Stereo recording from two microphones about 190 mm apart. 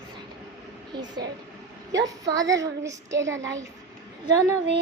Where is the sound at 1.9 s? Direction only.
75° right (ahead or behind).